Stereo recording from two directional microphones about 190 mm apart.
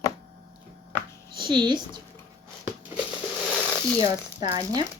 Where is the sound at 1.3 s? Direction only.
25° right (ahead or behind).